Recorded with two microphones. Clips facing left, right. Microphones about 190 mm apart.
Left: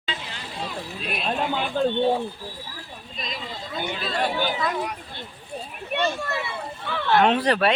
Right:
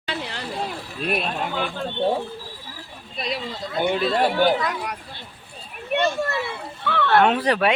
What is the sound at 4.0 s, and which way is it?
Speech, 60° right (ahead or behind).